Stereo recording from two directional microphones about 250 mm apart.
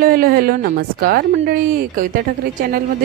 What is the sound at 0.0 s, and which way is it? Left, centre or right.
A woman's voice, right.